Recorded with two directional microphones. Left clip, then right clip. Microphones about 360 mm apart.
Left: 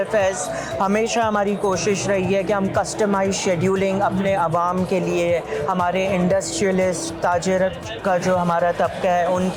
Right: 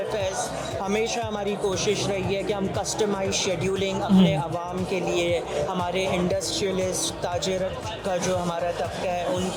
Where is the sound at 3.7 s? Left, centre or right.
Left.